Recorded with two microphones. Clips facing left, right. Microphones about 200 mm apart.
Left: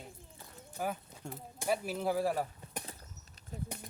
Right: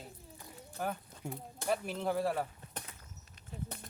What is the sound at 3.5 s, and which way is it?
Speech, 40° left (ahead or behind).